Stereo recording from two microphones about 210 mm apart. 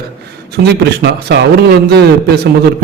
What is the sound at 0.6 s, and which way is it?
A man's voice, 50° right (ahead or behind).